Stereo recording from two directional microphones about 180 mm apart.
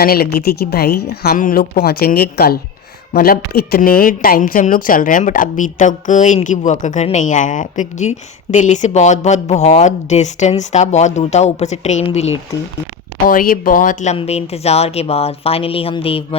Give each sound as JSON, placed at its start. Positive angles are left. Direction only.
{"t": 0.0, "sound": "a woman's voice", "side_deg": 55}
{"t": 13.2, "sound": "speech", "side_deg": 50}